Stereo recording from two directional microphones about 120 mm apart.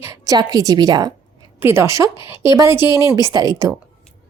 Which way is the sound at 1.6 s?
20° right (ahead or behind).